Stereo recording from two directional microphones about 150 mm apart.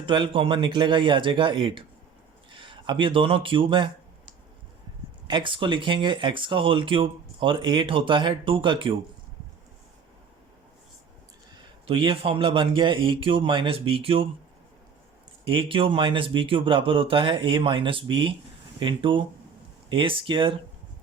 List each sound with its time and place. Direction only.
0.0 s speech: 35° right (ahead or behind)
5.3 s speech: 35° right (ahead or behind)
11.9 s speech: 35° right (ahead or behind)
15.4 s speech: 35° right (ahead or behind)